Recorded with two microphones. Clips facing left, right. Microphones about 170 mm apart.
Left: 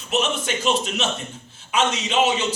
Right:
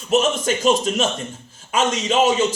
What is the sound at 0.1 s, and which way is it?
Speech, 45° right (ahead or behind).